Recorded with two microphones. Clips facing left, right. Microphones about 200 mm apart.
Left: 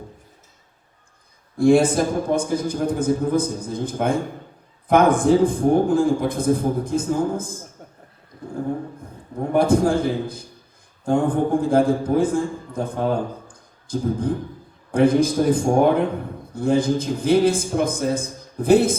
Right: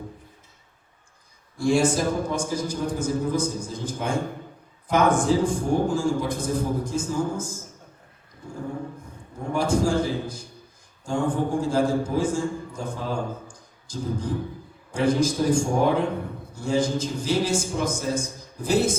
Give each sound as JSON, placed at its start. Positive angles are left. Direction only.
{"t": 1.5, "sound": "a man's voice", "side_deg": 55}
{"t": 9.4, "sound": "a man's voice", "side_deg": 55}